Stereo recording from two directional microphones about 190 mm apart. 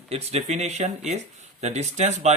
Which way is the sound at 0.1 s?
35° right (ahead or behind).